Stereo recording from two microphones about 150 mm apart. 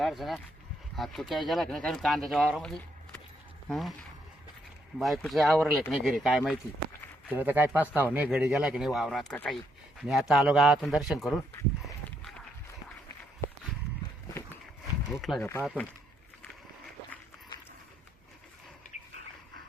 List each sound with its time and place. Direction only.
0.0 s speech: centre (ahead or behind)
4.9 s speech: centre (ahead or behind)
7.3 s speech: 15° right (ahead or behind); by 9.6 s 10° left (ahead or behind)
10.0 s speech: centre (ahead or behind)
15.2 s speech: centre (ahead or behind)